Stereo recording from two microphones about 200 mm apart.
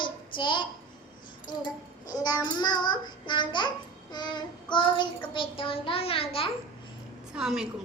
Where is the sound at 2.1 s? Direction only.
20° left (ahead or behind).